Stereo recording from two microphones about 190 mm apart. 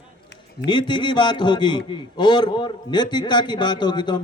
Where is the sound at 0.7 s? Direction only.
25° left (ahead or behind).